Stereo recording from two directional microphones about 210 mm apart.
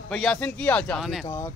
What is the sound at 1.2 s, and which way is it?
Speech, 15° left (ahead or behind).